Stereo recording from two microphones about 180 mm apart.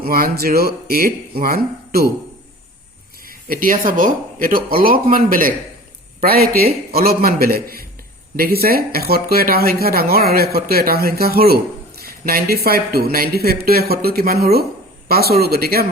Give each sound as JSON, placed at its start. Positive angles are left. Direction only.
{"t": 0.0, "sound": "speech", "side_deg": -55}
{"t": 3.2, "sound": "speech", "side_deg": -50}
{"t": 12.0, "sound": "a sound", "side_deg": -55}
{"t": 12.6, "sound": "speech", "side_deg": -60}